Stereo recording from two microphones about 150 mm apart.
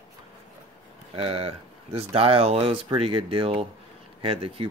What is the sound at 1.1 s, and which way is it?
Speech, 40° right (ahead or behind).